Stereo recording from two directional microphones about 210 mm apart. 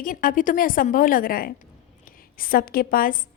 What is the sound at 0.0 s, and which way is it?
A woman's voice, 40° left (ahead or behind).